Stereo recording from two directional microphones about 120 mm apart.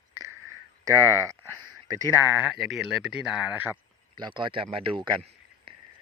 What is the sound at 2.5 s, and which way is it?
Speech, centre (ahead or behind).